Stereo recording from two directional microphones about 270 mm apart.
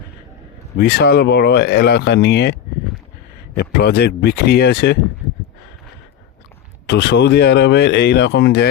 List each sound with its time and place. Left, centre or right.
0.8 s speech: left
3.6 s speech: left
6.8 s speech: left